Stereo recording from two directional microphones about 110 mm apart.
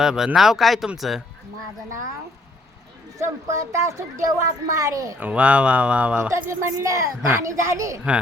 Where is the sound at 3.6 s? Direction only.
30° right (ahead or behind).